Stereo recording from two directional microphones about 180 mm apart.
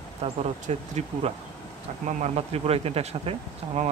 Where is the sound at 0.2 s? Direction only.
40° right (ahead or behind).